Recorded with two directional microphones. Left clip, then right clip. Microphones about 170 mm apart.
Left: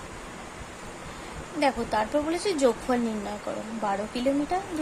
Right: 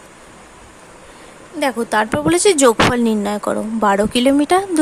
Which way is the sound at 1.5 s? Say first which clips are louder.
Right 8 dB; 40° right (ahead or behind).